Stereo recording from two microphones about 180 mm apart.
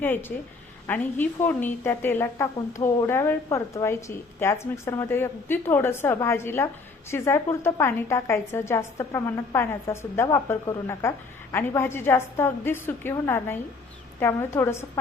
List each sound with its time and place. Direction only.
0.0 s a woman's voice: 10° left (ahead or behind)